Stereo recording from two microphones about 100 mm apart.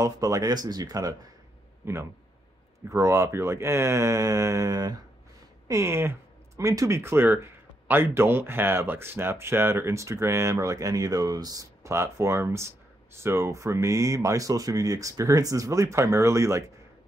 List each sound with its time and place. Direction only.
0.0 s speech: 35° right (ahead or behind)
2.9 s speech: 30° right (ahead or behind)
5.7 s speech: 25° right (ahead or behind)
7.0 s speech: 25° right (ahead or behind)